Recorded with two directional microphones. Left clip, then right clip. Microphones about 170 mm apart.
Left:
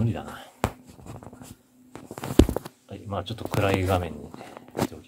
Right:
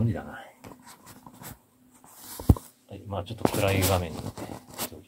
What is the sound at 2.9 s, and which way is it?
Speech, 25° left (ahead or behind).